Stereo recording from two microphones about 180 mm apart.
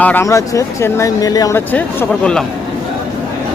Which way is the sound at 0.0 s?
10° left (ahead or behind).